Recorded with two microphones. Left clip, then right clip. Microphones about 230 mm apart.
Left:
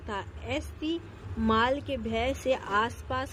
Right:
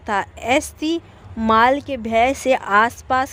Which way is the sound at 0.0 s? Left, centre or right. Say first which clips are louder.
Right 15 dB; right.